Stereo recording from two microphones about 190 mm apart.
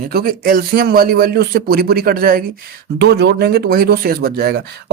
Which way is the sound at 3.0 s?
60° right (ahead or behind).